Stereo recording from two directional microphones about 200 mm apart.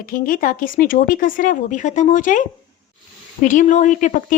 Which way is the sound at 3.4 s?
40° left (ahead or behind).